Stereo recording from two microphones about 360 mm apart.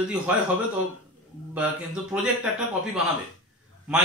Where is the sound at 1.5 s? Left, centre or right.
Centre.